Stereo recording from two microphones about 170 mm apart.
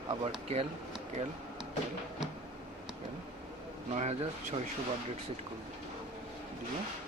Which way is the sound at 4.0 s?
40° right (ahead or behind).